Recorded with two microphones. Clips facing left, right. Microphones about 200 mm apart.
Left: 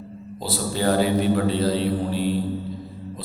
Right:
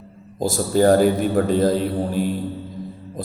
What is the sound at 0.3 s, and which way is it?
A man's voice, 45° right (ahead or behind).